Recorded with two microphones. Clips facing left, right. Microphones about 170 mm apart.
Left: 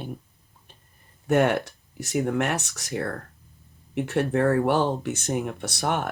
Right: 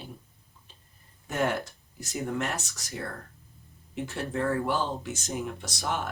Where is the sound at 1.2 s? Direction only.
65° left (ahead or behind).